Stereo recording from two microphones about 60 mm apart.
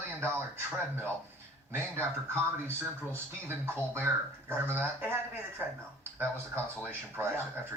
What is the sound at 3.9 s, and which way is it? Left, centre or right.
Speech, right.